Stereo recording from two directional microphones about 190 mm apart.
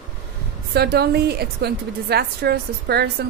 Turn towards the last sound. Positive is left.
turn(degrees=-55)  # may be behind; listen again after turning